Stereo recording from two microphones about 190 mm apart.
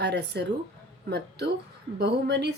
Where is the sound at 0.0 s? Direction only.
60° right (ahead or behind).